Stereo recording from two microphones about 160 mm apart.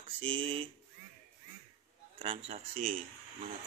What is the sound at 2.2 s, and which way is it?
Speech, 40° right (ahead or behind).